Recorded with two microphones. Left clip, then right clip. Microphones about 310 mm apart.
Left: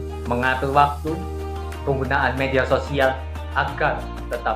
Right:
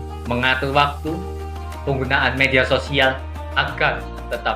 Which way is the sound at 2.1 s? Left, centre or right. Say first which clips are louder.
Right 5 dB; right.